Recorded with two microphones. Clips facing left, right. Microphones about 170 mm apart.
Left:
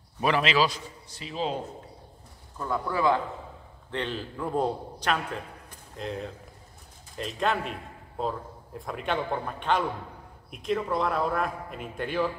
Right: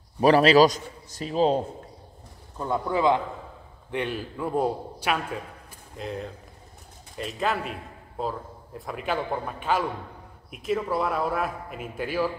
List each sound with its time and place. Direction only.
0.2 s a man's voice: 40° right (ahead or behind)
2.5 s a man's voice: 20° right (ahead or behind); by 12.3 s 5° right (ahead or behind)